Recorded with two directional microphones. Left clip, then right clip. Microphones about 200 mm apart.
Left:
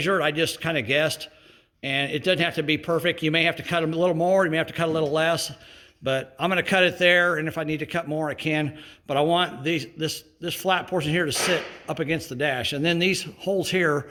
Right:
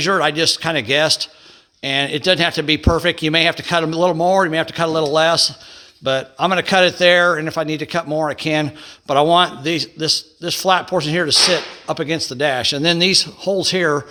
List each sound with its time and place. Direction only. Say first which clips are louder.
0.0 s a man's voice: right 7 dB; 35° right (ahead or behind)